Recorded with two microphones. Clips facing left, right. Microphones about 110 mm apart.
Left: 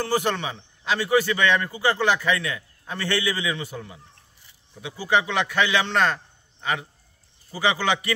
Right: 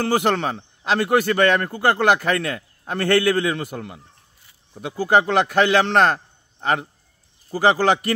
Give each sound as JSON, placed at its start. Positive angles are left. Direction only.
{"t": 0.0, "sound": "a man's voice", "side_deg": -60}